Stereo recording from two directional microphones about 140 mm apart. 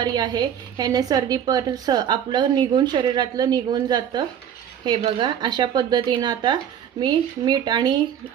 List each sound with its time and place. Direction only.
0.0 s a woman's voice: 30° right (ahead or behind)